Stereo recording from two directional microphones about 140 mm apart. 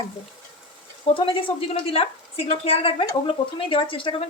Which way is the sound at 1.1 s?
40° left (ahead or behind).